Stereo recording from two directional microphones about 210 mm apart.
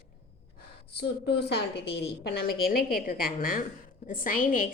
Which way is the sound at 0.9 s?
50° left (ahead or behind).